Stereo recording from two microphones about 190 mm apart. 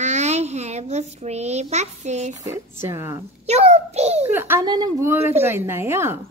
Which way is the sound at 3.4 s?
35° right (ahead or behind).